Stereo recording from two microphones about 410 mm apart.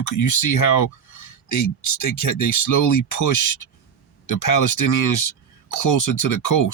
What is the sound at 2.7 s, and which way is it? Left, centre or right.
Speech, left.